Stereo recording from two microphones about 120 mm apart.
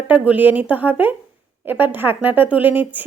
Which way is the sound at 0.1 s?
15° right (ahead or behind).